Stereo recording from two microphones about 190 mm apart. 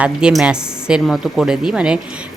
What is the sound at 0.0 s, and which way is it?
Speech, 5° right (ahead or behind).